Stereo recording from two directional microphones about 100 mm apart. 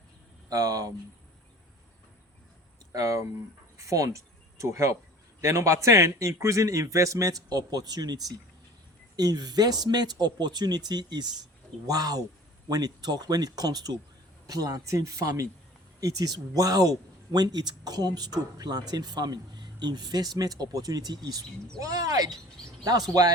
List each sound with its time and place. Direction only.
0.5 s a man's voice: 40° right (ahead or behind)
2.9 s a man's voice: 35° right (ahead or behind)